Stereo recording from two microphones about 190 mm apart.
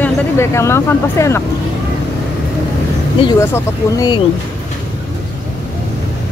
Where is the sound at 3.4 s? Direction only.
15° left (ahead or behind).